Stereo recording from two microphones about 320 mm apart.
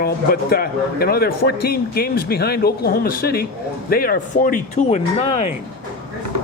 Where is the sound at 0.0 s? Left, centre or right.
Left.